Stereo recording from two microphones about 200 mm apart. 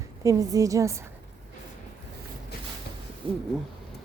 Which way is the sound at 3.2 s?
25° right (ahead or behind).